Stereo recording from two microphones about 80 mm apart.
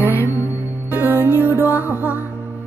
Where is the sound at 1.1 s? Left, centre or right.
Left.